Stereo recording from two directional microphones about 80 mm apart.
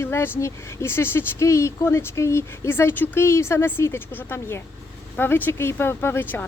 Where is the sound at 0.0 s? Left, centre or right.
Left.